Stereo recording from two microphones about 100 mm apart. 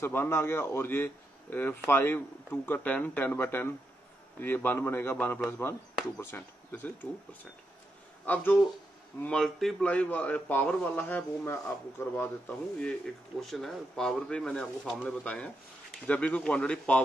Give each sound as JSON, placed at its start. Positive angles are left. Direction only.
{"t": 0.0, "sound": "speech", "side_deg": 20}
{"t": 8.3, "sound": "speech", "side_deg": 15}
{"t": 9.8, "sound": "speech", "side_deg": 15}
{"t": 12.8, "sound": "speech", "side_deg": 5}